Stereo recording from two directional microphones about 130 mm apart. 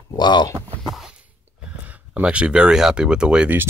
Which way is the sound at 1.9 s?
10° right (ahead or behind).